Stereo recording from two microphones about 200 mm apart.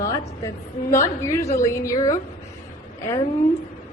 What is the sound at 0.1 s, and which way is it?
A woman's voice, 15° left (ahead or behind).